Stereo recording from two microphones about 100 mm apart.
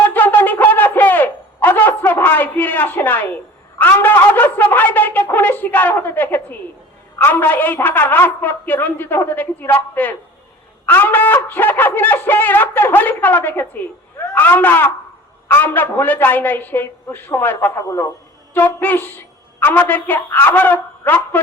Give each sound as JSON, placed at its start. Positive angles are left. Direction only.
{"t": 0.0, "sound": "a sound", "side_deg": 15}
{"t": 7.2, "sound": "a woman's voice", "side_deg": 20}
{"t": 17.7, "sound": "a man's voice", "side_deg": 30}
{"t": 18.5, "sound": "a woman's voice", "side_deg": 20}